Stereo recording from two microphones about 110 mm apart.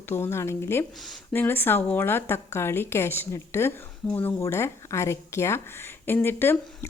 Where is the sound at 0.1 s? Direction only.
25° left (ahead or behind).